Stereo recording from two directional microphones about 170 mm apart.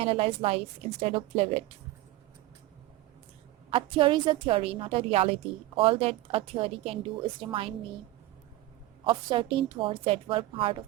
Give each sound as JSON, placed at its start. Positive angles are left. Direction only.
{"t": 0.0, "sound": "a woman's voice", "side_deg": -35}
{"t": 3.7, "sound": "a woman's voice", "side_deg": -30}
{"t": 9.0, "sound": "a woman's voice", "side_deg": -30}